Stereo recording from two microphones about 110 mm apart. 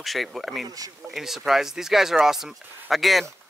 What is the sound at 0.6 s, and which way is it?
Speech, 35° right (ahead or behind).